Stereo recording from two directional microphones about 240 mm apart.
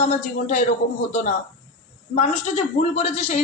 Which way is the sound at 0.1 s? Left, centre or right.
Left.